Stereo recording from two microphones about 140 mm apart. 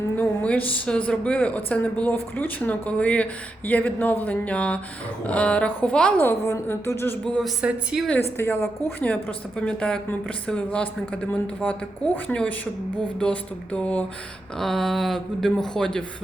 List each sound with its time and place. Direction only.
0.2 s a woman's voice: 10° left (ahead or behind)
7.3 s speech: 5° left (ahead or behind)
7.6 s a woman's voice: 5° right (ahead or behind)
8.4 s a woman's voice: 15° left (ahead or behind)